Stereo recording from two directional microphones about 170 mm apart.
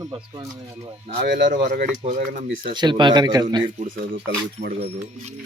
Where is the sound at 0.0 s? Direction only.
25° right (ahead or behind).